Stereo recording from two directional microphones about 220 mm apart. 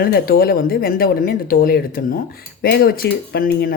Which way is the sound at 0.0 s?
45° left (ahead or behind).